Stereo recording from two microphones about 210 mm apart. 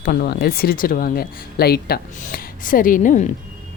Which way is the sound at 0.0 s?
50° left (ahead or behind).